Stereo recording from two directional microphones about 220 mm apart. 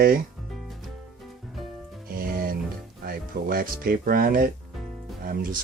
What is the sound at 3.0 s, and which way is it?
Speech, 40° right (ahead or behind).